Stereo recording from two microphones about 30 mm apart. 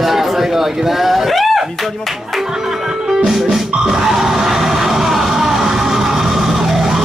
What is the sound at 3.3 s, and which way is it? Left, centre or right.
Music, centre.